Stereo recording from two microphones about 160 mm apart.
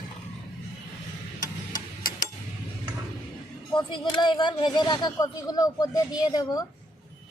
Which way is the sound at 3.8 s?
30° left (ahead or behind).